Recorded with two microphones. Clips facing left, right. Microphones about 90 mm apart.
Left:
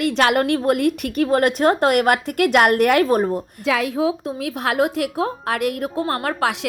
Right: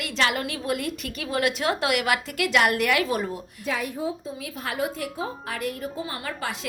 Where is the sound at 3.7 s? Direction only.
90° left; by 6.6 s 70° left (ahead or behind).